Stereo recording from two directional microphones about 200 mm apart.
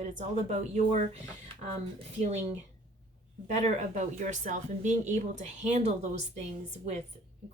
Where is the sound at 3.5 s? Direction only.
35° right (ahead or behind).